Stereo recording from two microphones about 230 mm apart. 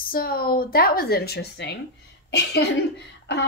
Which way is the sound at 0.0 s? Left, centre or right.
Left.